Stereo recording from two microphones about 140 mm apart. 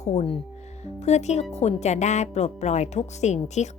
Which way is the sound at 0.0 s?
50° left (ahead or behind).